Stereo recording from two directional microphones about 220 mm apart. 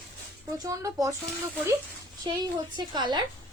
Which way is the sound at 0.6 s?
15° right (ahead or behind).